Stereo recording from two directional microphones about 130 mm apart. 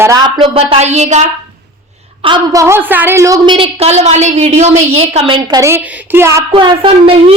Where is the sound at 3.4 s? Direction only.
40° right (ahead or behind).